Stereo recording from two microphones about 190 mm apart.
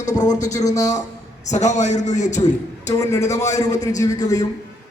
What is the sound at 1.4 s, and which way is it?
Speech, 40° left (ahead or behind).